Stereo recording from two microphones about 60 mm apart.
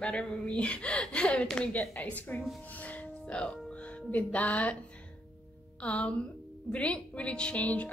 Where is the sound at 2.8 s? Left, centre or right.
Left.